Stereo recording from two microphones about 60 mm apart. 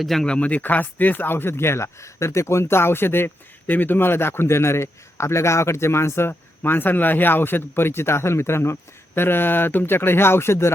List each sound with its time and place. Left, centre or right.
0.0 s speech: centre
0.3 s speech: left